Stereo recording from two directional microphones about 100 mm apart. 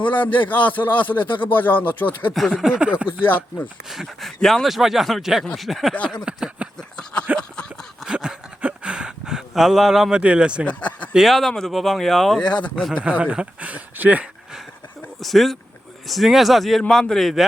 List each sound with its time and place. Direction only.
0.0 s speech: 15° left (ahead or behind)
1.3 s speech: 55° left (ahead or behind)
1.5 s speech: 20° left (ahead or behind)
2.6 s speech: 5° right (ahead or behind)
5.9 s speech: 10° left (ahead or behind)
6.2 s a sound: 10° right (ahead or behind)
6.7 s a sound: 10° left (ahead or behind)
8.0 s a sound: 5° right (ahead or behind)
10.7 s speech: 15° left (ahead or behind)
11.1 s speech: centre (ahead or behind)
13.0 s speech: 15° right (ahead or behind)
15.2 s speech: centre (ahead or behind)